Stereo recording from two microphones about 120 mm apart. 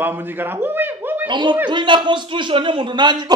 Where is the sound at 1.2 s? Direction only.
40° right (ahead or behind).